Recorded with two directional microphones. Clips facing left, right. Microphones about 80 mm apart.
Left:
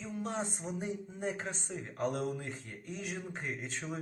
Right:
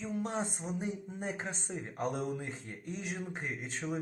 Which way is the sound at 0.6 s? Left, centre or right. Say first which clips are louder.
Right 1 dB; centre.